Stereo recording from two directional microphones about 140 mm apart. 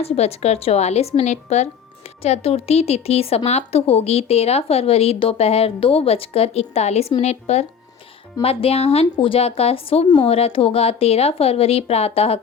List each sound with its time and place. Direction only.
0.0 s speech: 50° left (ahead or behind)